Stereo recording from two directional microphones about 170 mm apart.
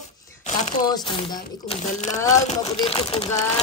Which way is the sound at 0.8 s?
25° left (ahead or behind).